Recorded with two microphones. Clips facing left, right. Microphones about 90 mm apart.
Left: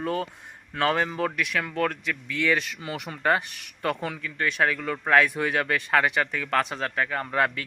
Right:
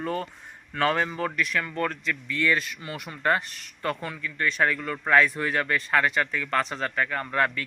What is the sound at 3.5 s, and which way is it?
Speech, 65° left (ahead or behind).